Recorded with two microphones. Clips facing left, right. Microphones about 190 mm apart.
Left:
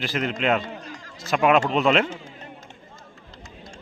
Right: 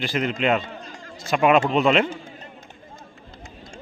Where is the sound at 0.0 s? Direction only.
Centre (ahead or behind).